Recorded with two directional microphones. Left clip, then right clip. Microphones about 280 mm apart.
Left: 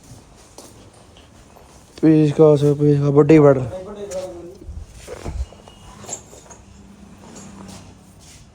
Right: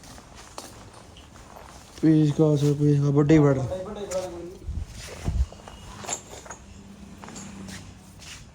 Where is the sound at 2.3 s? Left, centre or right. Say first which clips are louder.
Left 10 dB; centre.